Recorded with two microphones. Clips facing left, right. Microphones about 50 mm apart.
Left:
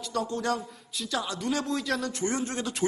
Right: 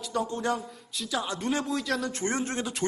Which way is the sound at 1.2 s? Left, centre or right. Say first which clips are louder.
Right 1 dB; right.